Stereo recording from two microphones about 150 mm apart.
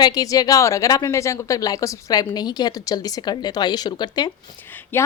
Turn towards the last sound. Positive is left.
turn(degrees=15)  # may be behind; listen again after turning